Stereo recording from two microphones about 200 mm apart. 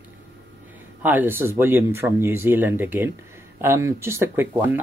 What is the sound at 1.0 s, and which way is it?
Speech, 10° right (ahead or behind).